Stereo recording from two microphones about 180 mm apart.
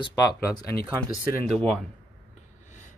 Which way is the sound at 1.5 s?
5° left (ahead or behind).